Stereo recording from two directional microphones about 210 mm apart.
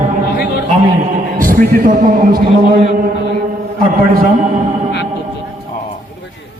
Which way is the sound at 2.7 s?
35° right (ahead or behind).